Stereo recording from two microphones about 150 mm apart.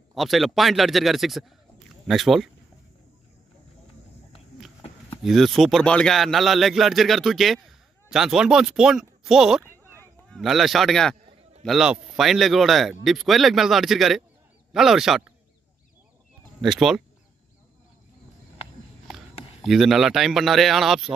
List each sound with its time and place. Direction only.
0.1 s a man's voice: centre (ahead or behind)
5.2 s a man's voice: centre (ahead or behind)
9.7 s a sound: 15° left (ahead or behind)
10.3 s a man's voice: centre (ahead or behind)
16.6 s a man's voice: 5° right (ahead or behind)
19.6 s a man's voice: centre (ahead or behind)